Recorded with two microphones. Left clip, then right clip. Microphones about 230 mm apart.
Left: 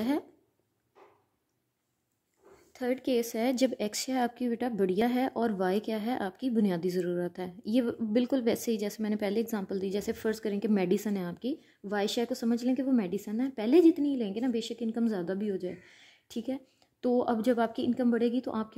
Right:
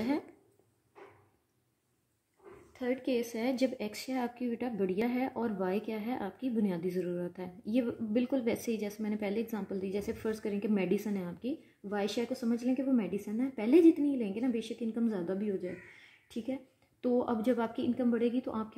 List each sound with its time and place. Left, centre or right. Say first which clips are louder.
2.7 s speech: left 3 dB; left